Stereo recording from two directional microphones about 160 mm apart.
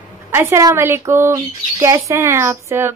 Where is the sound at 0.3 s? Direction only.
15° right (ahead or behind).